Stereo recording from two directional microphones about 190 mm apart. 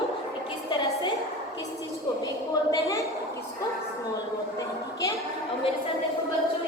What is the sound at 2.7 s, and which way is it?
Speech, 15° left (ahead or behind).